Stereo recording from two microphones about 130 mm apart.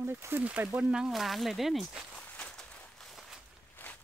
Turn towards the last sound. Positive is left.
turn(degrees=15)  # may be behind; listen again after turning